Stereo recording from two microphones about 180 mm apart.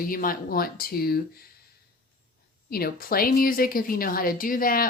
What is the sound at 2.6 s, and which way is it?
A woman's voice, 55° left (ahead or behind).